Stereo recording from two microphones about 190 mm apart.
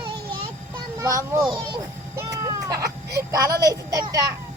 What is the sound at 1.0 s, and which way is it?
Speech, 15° right (ahead or behind).